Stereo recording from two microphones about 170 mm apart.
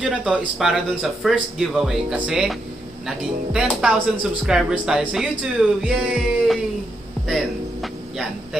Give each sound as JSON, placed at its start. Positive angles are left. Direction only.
{"t": 0.0, "sound": "speech", "side_deg": -5}